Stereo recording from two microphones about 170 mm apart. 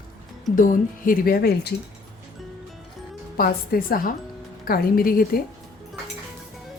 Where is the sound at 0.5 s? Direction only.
55° left (ahead or behind).